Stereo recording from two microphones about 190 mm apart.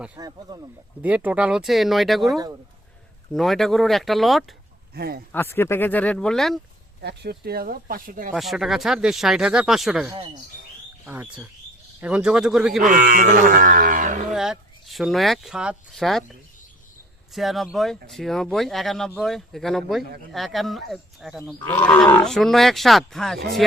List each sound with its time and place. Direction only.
0.2 s speech: 20° right (ahead or behind)
1.0 s speech: 10° right (ahead or behind)
4.9 s speech: 55° right (ahead or behind)
5.3 s speech: 10° left (ahead or behind)
7.0 s speech: 60° right (ahead or behind)
8.3 s speech: centre (ahead or behind)
12.8 s speech: 45° right (ahead or behind)
14.3 s speech: 5° right (ahead or behind)
17.3 s speech: centre (ahead or behind)